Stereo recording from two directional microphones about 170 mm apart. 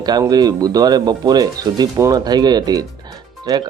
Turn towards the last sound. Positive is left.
turn(degrees=-25)  # may be behind; listen again after turning